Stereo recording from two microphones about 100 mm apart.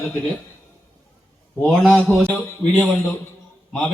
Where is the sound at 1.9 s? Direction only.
15° left (ahead or behind).